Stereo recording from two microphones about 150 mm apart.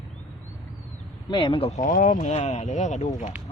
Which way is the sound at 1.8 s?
55° left (ahead or behind).